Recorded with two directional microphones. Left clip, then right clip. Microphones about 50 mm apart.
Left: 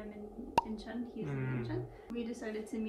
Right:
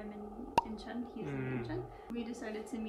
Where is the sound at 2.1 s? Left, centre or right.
Right.